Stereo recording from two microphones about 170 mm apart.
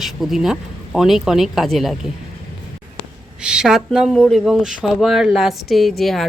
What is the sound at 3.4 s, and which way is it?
Speech, 5° right (ahead or behind).